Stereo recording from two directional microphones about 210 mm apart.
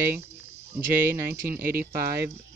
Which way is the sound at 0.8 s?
40° right (ahead or behind).